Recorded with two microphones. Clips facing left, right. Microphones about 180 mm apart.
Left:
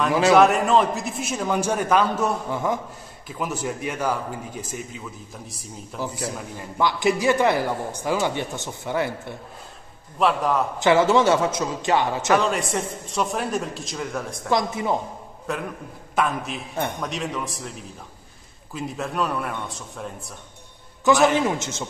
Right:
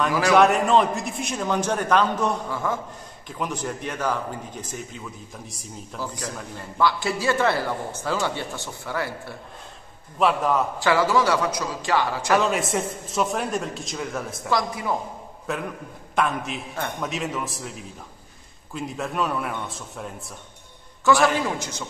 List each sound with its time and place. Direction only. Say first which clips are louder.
0.3 s a man's voice: left 1 dB; centre (ahead or behind)
2.5 s speech: left 2 dB; 20° left (ahead or behind)
3.3 s a man's voice: left 1 dB; 5° left (ahead or behind)
6.0 s a man's voice: left 4 dB; 10° left (ahead or behind)
10.1 s a man's voice: even; centre (ahead or behind)
10.8 s speech: left 5 dB; 20° left (ahead or behind)
12.4 s a man's voice: right 1 dB; centre (ahead or behind)
14.5 s speech: left 2 dB; 25° left (ahead or behind)
15.5 s a man's voice: even; centre (ahead or behind)
21.0 s speech: left 2 dB; 20° left (ahead or behind)